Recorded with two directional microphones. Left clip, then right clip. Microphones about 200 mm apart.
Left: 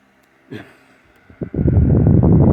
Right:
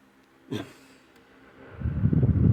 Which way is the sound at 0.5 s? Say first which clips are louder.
Left 1 dB; centre (ahead or behind).